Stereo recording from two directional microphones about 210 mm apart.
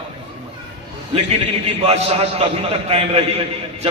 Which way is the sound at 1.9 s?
30° right (ahead or behind).